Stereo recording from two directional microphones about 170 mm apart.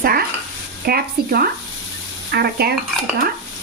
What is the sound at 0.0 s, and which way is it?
Stir, 65° right (ahead or behind).